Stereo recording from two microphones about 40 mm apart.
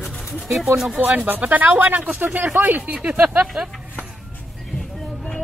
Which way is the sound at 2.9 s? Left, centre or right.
Right.